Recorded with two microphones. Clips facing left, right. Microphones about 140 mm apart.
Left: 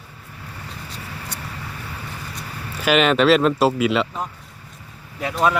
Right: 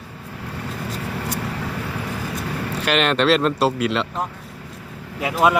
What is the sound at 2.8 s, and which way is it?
Speech, centre (ahead or behind).